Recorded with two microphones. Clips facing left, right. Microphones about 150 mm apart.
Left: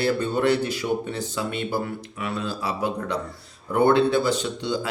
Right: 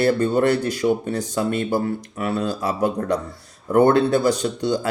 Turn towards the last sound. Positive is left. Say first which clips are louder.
# right 5 dB
turn(degrees=-45)  # may be behind; listen again after turning